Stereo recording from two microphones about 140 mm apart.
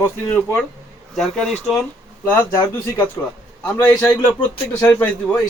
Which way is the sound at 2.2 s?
15° left (ahead or behind).